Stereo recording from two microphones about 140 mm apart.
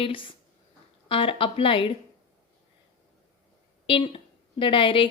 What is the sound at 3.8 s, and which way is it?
Speech, 40° left (ahead or behind).